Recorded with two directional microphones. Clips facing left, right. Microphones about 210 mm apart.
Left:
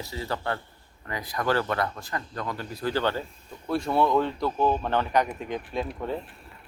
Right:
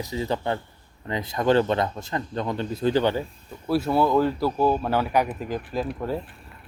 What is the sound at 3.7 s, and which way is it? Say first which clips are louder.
A man's voice: right 3 dB; 5° right (ahead or behind).